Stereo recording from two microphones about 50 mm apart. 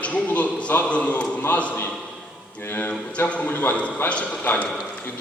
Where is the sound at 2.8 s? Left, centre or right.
Left.